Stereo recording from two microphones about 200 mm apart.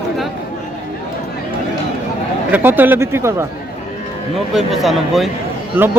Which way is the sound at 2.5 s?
10° right (ahead or behind).